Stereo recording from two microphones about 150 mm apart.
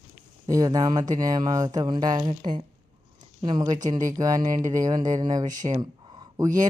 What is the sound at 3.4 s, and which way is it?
Speech, 30° right (ahead or behind).